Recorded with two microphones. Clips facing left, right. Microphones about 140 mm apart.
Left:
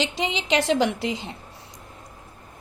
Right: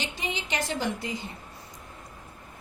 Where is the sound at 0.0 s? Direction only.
90° left.